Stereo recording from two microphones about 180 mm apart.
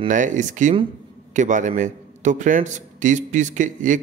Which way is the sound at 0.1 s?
45° right (ahead or behind).